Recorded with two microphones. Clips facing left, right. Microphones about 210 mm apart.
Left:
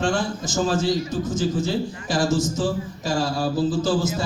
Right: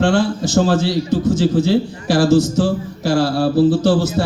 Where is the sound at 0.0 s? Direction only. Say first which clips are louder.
Right 8 dB; 65° right (ahead or behind).